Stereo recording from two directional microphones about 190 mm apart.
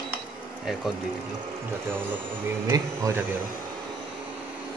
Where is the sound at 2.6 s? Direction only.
20° right (ahead or behind).